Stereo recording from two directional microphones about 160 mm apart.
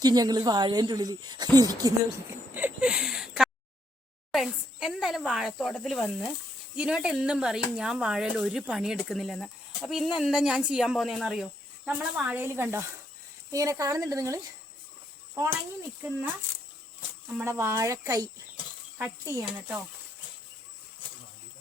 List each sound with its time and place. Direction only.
0.0 s speech: 25° right (ahead or behind)
2.6 s a sound: 10° right (ahead or behind)
4.3 s speech: 5° right (ahead or behind); by 14.4 s 20° right (ahead or behind)
17.3 s speech: 15° right (ahead or behind)